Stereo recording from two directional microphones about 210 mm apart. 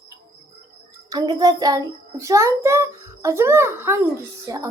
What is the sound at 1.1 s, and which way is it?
A child's voice, 20° right (ahead or behind).